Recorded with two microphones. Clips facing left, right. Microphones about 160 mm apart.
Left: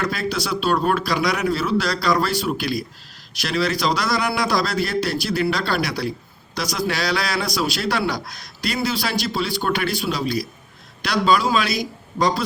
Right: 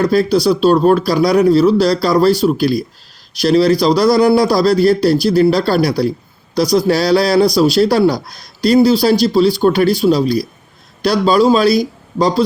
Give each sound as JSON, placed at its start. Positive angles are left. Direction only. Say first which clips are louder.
{"t": 0.0, "sound": "a man's voice", "louder": "right 12 dB", "side_deg": -35}